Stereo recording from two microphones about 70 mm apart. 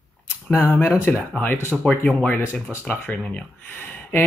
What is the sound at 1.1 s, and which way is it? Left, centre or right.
Speech, left.